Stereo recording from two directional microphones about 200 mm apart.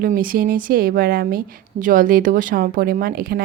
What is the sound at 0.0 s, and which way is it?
Speech, 45° right (ahead or behind).